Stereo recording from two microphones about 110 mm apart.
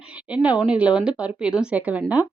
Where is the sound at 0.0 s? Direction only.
10° right (ahead or behind).